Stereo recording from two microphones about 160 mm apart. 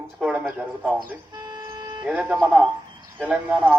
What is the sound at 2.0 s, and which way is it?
A man's voice, 10° right (ahead or behind).